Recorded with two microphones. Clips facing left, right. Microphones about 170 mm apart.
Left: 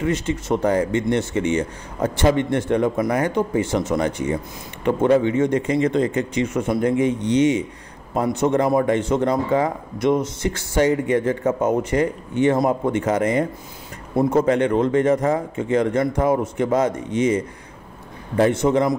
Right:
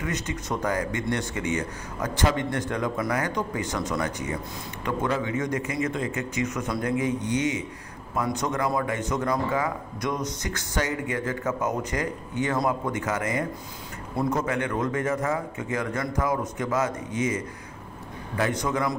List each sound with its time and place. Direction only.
0.0 s a man's voice: 25° left (ahead or behind)